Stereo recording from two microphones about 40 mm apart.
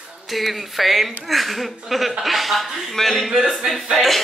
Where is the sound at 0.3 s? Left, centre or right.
Centre.